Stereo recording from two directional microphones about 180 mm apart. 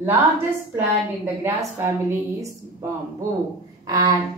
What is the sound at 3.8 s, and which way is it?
Speech, 20° right (ahead or behind).